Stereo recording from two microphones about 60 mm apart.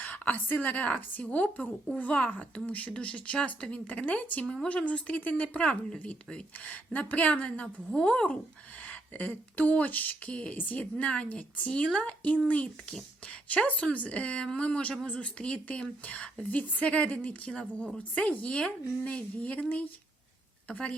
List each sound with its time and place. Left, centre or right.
0.0 s speech: left
20.7 s a woman's voice: centre